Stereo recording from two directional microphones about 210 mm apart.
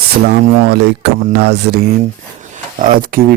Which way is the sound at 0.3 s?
50° right (ahead or behind).